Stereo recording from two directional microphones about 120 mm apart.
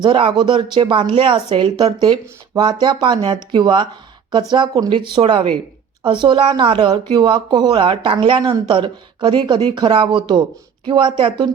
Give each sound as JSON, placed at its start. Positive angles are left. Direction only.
{"t": 0.0, "sound": "speech", "side_deg": -40}